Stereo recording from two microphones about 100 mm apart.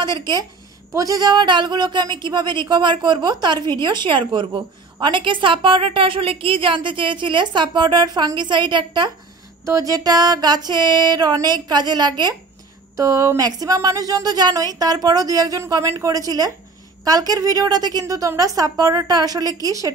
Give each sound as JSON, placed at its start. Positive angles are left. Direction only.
{"t": 0.0, "sound": "a woman's voice", "side_deg": -50}
{"t": 9.7, "sound": "speech", "side_deg": -35}
{"t": 12.9, "sound": "a woman's voice", "side_deg": -35}